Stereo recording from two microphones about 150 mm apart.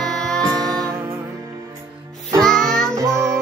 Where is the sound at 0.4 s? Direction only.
25° right (ahead or behind).